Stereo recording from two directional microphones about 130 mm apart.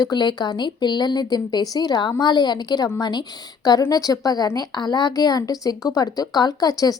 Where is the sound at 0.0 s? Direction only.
35° left (ahead or behind).